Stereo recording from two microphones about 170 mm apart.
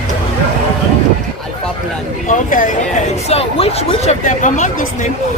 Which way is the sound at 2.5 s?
50° left (ahead or behind).